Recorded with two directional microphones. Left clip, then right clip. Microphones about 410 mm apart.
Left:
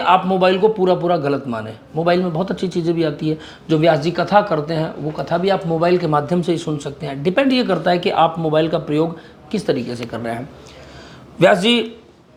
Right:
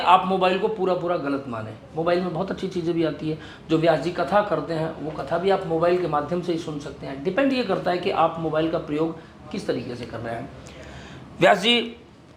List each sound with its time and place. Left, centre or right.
0.0 s speech: left
2.0 s speech: left
11.3 s a man's voice: left